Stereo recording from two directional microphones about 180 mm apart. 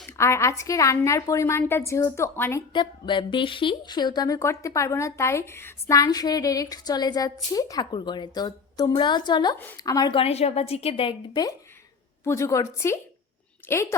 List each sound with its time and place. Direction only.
0.2 s a woman's voice: 15° left (ahead or behind)
2.7 s a woman's voice: 25° left (ahead or behind)